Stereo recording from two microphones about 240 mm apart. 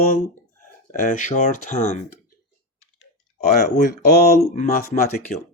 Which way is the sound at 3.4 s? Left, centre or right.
Left.